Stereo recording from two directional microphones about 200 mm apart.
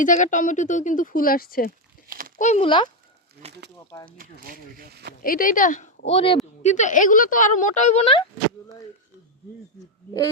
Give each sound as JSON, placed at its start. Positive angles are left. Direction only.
{"t": 0.0, "sound": "speech", "side_deg": 40}
{"t": 2.0, "sound": "a sound", "side_deg": -45}
{"t": 2.4, "sound": "speech", "side_deg": 30}
{"t": 3.4, "sound": "speech", "side_deg": -30}
{"t": 4.2, "sound": "speech", "side_deg": -45}
{"t": 5.2, "sound": "speech", "side_deg": 45}